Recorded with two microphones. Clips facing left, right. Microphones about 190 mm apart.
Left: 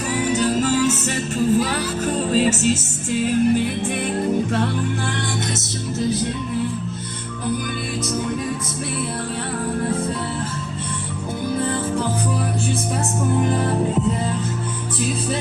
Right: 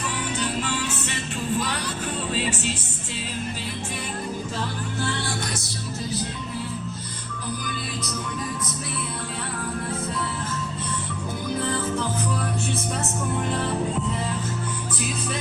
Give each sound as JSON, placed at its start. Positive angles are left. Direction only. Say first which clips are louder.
{"t": 0.1, "sound": "music", "louder": "left 11 dB", "side_deg": 40}